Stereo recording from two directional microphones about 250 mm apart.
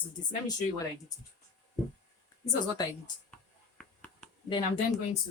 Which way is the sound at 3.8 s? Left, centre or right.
Centre.